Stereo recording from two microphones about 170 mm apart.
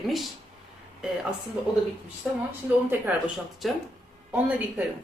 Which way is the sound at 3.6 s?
Centre (ahead or behind).